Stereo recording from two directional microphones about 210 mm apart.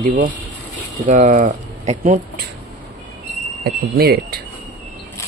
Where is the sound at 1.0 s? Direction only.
35° right (ahead or behind).